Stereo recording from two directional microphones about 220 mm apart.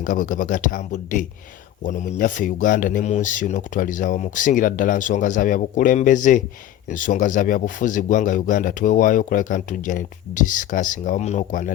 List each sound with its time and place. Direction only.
0.0 s a man's voice: 40° left (ahead or behind)